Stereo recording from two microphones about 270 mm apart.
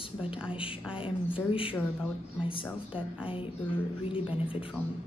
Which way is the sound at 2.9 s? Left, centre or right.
Centre.